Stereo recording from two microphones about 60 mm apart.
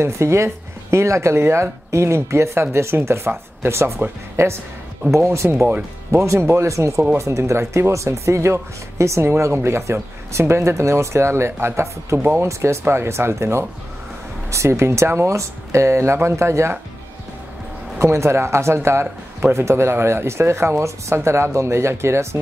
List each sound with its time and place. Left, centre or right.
0.0 s speech: right
17.9 s speech: right